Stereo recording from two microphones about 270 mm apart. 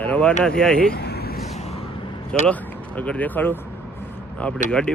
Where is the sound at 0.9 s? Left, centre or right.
Left.